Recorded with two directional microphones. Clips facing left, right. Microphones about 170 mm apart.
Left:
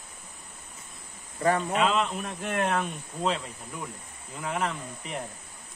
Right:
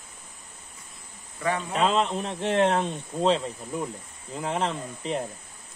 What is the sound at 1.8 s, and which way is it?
Speech, 35° right (ahead or behind).